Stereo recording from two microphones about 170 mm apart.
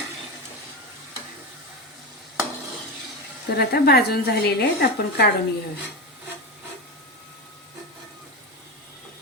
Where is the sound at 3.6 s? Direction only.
70° left (ahead or behind).